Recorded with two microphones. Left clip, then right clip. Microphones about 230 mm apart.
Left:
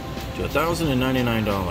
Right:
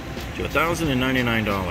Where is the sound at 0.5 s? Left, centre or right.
Centre.